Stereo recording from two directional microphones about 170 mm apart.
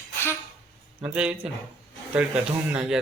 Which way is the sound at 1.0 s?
5° right (ahead or behind).